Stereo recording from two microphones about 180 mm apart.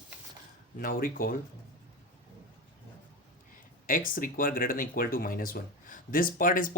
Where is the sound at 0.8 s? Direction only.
55° left (ahead or behind).